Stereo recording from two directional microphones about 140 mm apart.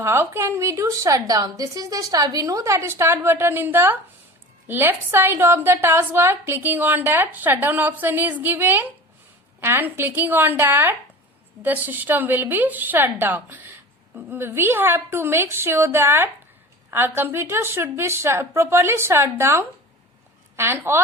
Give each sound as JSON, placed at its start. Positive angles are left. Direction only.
{"t": 0.0, "sound": "a woman's voice", "side_deg": -15}